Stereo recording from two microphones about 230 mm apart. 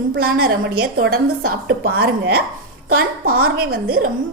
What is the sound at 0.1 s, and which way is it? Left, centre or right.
A woman's voice, right.